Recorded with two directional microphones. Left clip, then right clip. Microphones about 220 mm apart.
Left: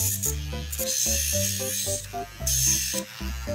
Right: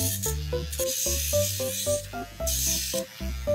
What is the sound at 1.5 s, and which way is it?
Music, 20° left (ahead or behind).